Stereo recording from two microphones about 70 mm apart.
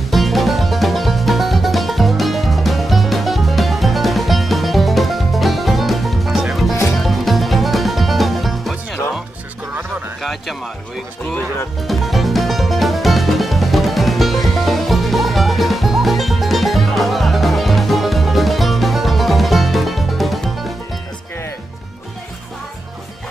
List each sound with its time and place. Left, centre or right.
0.1 s music: centre
11.9 s music: centre